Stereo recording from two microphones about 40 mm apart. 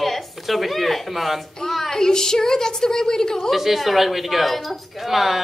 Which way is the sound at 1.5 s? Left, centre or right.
Centre.